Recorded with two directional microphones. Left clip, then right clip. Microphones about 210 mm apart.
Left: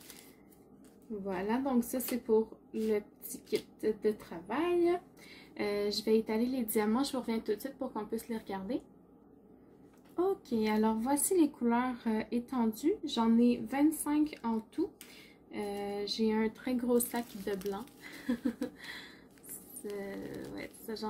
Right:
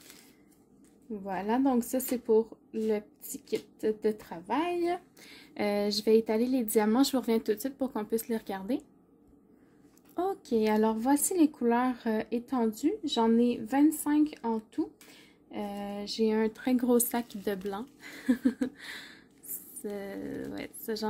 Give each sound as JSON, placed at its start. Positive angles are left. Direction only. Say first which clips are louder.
{"t": 1.2, "sound": "a woman's voice", "louder": "right 5 dB", "side_deg": -50}
{"t": 10.1, "sound": "a woman's voice", "louder": "right 3 dB", "side_deg": -50}